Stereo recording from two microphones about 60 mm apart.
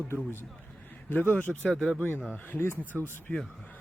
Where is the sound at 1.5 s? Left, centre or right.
Centre.